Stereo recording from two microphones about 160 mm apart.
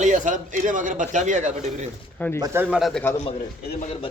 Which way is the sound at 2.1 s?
10° left (ahead or behind).